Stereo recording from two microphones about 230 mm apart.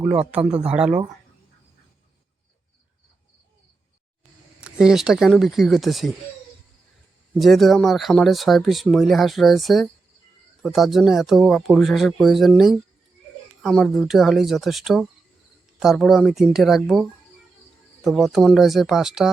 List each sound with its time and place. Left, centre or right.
0.0 s speech: centre
0.3 s speech: centre
4.6 s speech: centre
7.3 s speech: centre